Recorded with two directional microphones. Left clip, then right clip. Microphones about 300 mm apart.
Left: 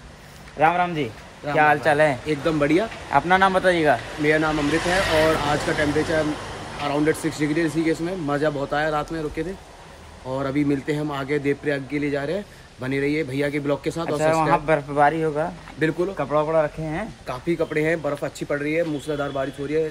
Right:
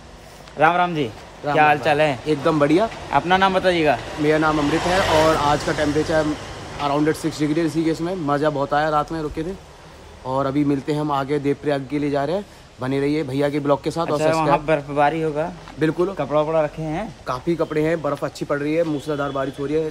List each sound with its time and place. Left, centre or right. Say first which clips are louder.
0.6 s speech: right 2 dB; centre
2.2 s speech: right 3 dB; centre
4.6 s speech: right 2 dB; right
5.1 s speech: right 4 dB; centre
10.3 s speech: right 3 dB; centre